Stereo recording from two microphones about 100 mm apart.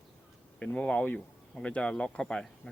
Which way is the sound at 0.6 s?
15° left (ahead or behind).